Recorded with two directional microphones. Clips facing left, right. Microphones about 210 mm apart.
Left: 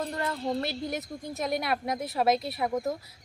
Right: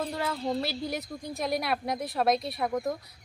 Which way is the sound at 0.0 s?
5° right (ahead or behind).